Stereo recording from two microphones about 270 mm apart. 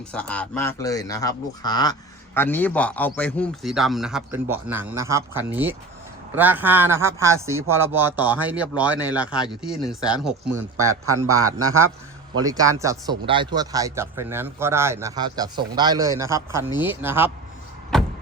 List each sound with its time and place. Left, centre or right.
0.1 s speech: centre
11.4 s a man's voice: right
12.5 s speech: centre
17.9 s vehicle: centre